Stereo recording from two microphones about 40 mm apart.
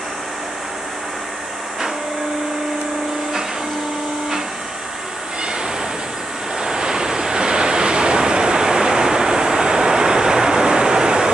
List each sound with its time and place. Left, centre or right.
6.6 s vehicle: centre